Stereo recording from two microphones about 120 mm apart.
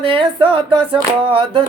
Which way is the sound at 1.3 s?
45° right (ahead or behind).